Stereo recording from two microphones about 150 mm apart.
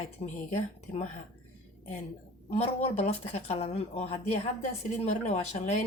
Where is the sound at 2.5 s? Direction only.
40° left (ahead or behind).